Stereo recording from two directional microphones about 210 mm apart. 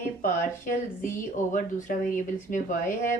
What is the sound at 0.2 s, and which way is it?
Speech, 40° left (ahead or behind).